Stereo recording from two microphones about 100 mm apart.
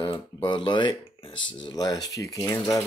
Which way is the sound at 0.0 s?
50° left (ahead or behind).